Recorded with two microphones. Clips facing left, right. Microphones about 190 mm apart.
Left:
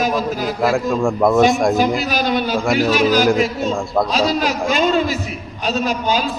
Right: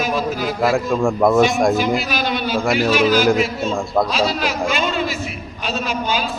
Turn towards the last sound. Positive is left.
turn(degrees=40)  # may be behind; listen again after turning